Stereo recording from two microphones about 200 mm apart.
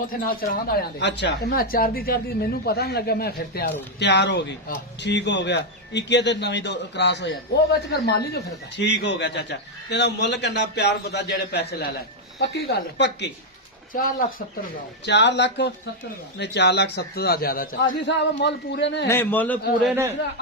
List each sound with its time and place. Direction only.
0.1 s a man's voice: 45° left (ahead or behind)
13.9 s speech: 45° left (ahead or behind)
15.0 s a man's voice: 60° left (ahead or behind)
19.0 s a man's voice: 10° left (ahead or behind)